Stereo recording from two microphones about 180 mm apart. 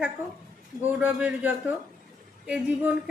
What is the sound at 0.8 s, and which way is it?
Speech, 10° right (ahead or behind).